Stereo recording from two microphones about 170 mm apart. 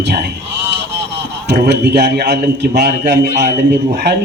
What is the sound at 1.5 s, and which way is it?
A man's voice, 70° right (ahead or behind).